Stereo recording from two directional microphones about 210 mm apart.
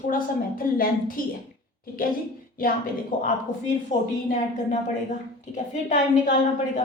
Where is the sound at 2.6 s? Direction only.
40° left (ahead or behind).